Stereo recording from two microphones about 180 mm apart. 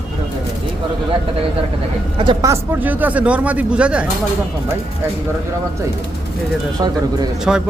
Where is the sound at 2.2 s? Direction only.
25° right (ahead or behind); by 4.1 s 5° right (ahead or behind).